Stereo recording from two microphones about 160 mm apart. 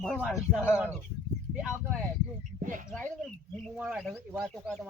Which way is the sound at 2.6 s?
55° right (ahead or behind).